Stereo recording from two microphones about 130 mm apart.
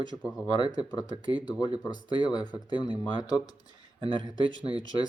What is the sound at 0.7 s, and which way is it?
Speech, 30° left (ahead or behind).